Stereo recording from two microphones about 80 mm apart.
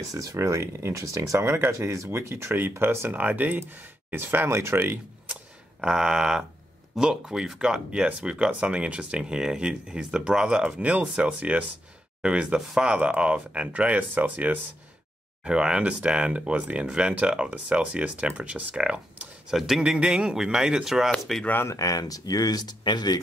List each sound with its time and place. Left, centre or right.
0.1 s speech: right
5.3 s a sound: centre
7.0 s speech: centre
21.1 s speech: centre
21.6 s speech: left